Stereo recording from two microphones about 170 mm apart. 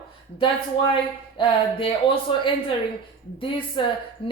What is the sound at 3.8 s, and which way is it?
Speech, 30° left (ahead or behind).